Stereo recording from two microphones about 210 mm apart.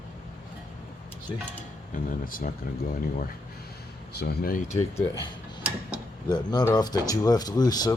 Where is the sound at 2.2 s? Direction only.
40° left (ahead or behind).